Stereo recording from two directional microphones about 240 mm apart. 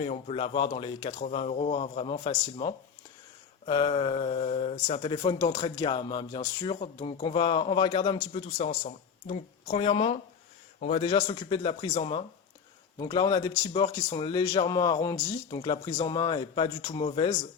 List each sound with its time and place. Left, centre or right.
0.0 s a man's voice: left
11.0 s speech: left